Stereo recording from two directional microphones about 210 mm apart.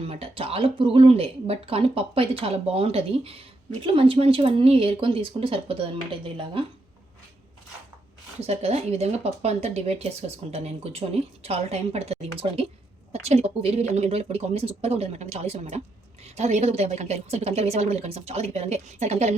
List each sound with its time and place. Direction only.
0.0 s speech: 25° right (ahead or behind)
8.4 s speech: 30° right (ahead or behind)